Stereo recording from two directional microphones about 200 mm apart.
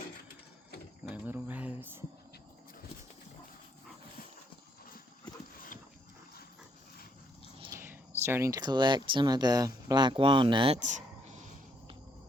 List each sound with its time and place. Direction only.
1.0 s cricket: 5° right (ahead or behind)
5.5 s horse: 45° left (ahead or behind)
7.6 s speech: 15° right (ahead or behind); by 11.3 s 35° right (ahead or behind)